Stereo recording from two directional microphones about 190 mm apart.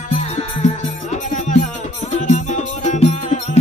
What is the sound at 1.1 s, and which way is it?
Music, 40° left (ahead or behind).